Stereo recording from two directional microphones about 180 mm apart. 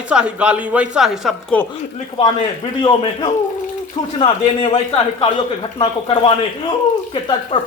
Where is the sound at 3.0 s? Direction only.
25° left (ahead or behind).